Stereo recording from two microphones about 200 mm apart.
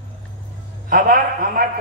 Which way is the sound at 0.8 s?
45° right (ahead or behind).